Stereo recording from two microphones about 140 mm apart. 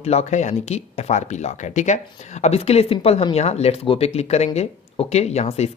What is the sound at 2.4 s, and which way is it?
Speech, 50° left (ahead or behind).